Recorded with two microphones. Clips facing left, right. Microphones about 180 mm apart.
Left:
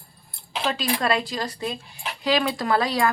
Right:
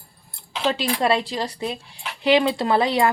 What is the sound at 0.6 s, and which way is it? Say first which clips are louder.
A woman's voice: right 3 dB; 25° right (ahead or behind).